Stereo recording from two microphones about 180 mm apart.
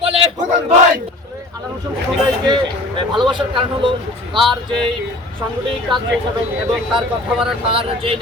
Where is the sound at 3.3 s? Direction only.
25° right (ahead or behind).